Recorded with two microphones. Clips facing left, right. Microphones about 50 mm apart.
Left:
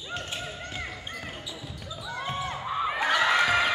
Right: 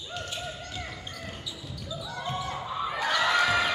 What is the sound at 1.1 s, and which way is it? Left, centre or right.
Basketball bounce, left.